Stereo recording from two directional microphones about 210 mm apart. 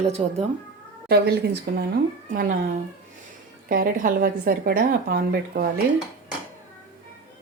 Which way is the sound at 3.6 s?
40° right (ahead or behind).